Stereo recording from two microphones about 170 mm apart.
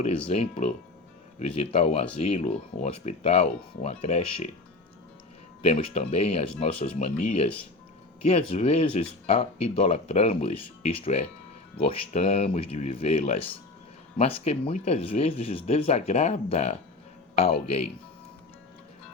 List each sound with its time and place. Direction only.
0.3 s speech: 35° left (ahead or behind)
5.6 s speech: 40° left (ahead or behind)